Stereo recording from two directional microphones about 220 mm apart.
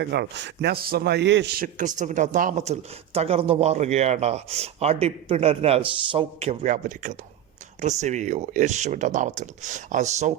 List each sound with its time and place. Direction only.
0.0 s a man's voice: 50° right (ahead or behind); by 10.3 s 30° right (ahead or behind)